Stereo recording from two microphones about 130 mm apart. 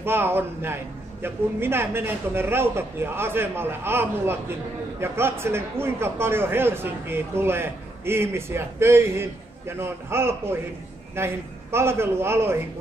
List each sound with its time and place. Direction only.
0.0 s a man's voice: 15° right (ahead or behind)